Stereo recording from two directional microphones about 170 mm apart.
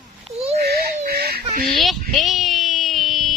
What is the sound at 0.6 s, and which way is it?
Fowl, 70° right (ahead or behind).